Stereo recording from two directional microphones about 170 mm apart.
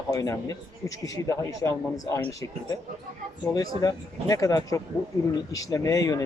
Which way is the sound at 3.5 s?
20° left (ahead or behind).